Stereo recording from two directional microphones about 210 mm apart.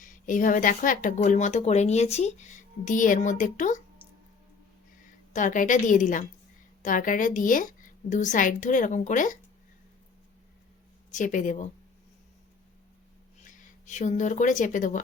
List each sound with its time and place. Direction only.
0.0 s speech: 40° left (ahead or behind)
5.3 s speech: 35° left (ahead or behind)
11.1 s speech: 35° left (ahead or behind)
13.4 s speech: 35° left (ahead or behind)